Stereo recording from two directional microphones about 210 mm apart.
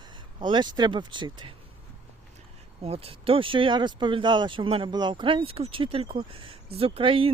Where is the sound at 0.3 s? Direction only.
20° right (ahead or behind).